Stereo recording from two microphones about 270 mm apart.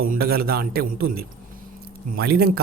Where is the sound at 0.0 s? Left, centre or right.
Right.